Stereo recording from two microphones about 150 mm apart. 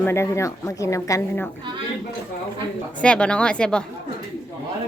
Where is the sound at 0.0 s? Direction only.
20° left (ahead or behind).